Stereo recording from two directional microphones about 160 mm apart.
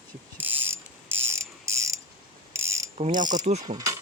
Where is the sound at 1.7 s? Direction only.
20° right (ahead or behind).